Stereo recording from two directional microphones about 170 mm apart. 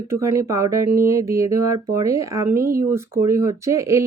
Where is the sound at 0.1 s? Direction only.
15° right (ahead or behind).